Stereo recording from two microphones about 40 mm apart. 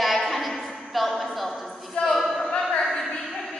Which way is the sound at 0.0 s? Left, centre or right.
Centre.